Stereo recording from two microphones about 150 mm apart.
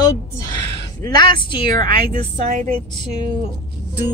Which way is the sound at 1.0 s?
30° left (ahead or behind).